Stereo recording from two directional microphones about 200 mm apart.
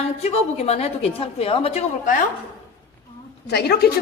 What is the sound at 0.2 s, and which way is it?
A woman's voice, 30° left (ahead or behind).